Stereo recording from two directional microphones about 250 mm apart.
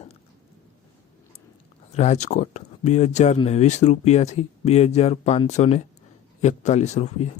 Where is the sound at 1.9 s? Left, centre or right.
Left.